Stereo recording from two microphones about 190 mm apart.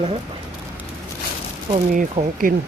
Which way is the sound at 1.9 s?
45° right (ahead or behind).